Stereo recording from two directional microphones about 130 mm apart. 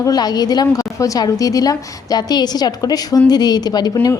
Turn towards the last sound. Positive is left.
turn(degrees=30)  # may be behind; listen again after turning